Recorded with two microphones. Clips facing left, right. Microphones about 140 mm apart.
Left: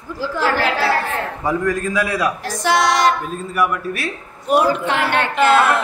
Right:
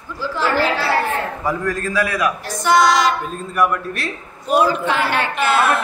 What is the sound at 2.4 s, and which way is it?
Music, 80° left.